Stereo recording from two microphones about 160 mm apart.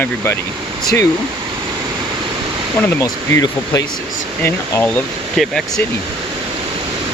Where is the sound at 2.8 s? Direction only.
15° left (ahead or behind).